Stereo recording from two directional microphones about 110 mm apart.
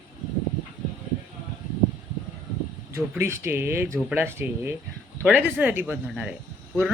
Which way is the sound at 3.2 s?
25° right (ahead or behind).